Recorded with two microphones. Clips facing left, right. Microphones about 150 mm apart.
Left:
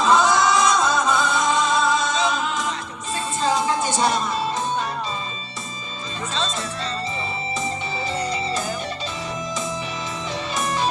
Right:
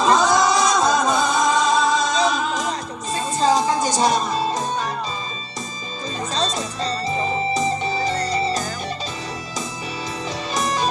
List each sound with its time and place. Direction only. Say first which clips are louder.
0.2 s music: right 1 dB; 40° right (ahead or behind)
6.3 s music: right 2 dB; 40° right (ahead or behind)
10.5 s music: right 2 dB; 40° right (ahead or behind)